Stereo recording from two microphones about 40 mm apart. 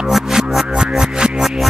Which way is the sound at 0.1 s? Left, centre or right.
Centre.